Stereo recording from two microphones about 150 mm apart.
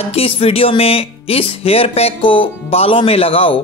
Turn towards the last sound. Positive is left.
turn(degrees=40)  # may be behind; listen again after turning